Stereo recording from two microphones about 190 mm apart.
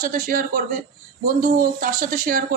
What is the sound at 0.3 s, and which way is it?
A woman's voice, 50° right (ahead or behind).